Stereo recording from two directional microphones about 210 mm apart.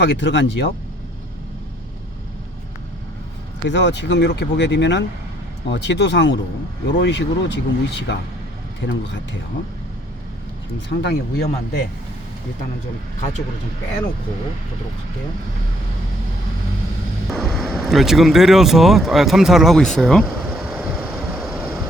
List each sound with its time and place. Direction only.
0.0 s speech: 55° left (ahead or behind)
3.7 s speech: 55° left (ahead or behind)
10.8 s speech: 50° left (ahead or behind)
17.3 s speech: centre (ahead or behind)
20.7 s vehicle: 5° right (ahead or behind)